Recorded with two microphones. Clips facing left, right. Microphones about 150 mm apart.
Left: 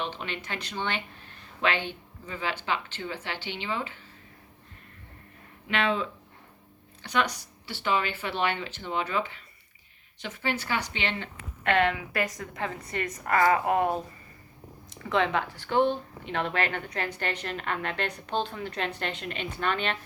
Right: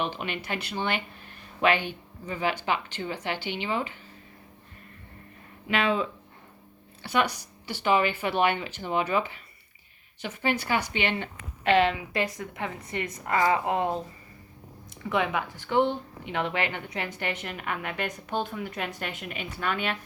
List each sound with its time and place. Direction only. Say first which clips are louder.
0.0 s a woman's voice: right 3 dB; 10° right (ahead or behind)
5.6 s a woman's voice: right 2 dB; 5° right (ahead or behind)
11.6 s a woman's voice: right 2 dB; 25° right (ahead or behind)
15.1 s a woman's voice: left 1 dB; 10° right (ahead or behind)